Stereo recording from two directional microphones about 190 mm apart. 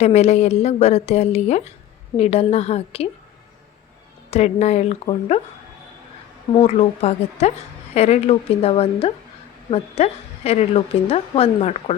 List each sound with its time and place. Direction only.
0.0 s a woman's voice: 35° left (ahead or behind)
4.3 s a woman's voice: 35° left (ahead or behind)
6.5 s a woman's voice: 30° left (ahead or behind)